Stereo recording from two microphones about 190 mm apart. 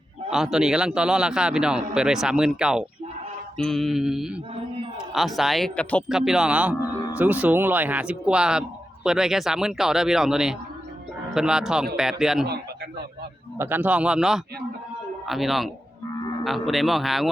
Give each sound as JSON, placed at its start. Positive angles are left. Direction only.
{"t": 0.3, "sound": "a man's voice", "side_deg": 0}
{"t": 13.6, "sound": "a man's voice", "side_deg": -10}